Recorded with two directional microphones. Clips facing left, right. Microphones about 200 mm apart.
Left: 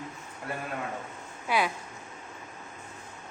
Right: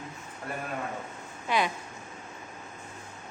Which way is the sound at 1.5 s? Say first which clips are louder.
Even; 10° left (ahead or behind).